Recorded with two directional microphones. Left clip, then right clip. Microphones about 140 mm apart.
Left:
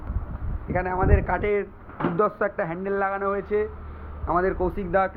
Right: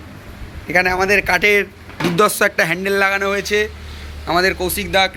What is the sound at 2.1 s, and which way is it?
Speech, 15° right (ahead or behind).